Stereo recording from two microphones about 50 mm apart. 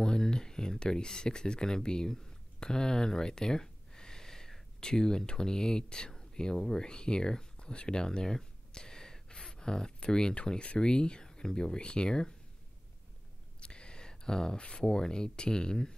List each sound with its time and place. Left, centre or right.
0.0 s speech: centre
13.6 s speech: centre